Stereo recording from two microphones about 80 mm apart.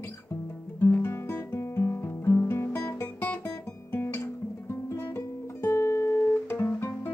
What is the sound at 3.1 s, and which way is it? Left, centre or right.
Guitar, left.